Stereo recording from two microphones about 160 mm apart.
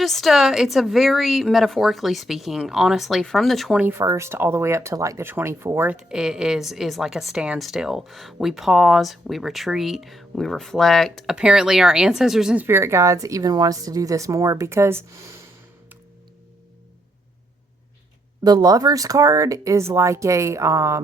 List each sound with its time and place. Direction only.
0.0 s speech: centre (ahead or behind); by 15.0 s 15° right (ahead or behind)
18.4 s speech: 25° right (ahead or behind)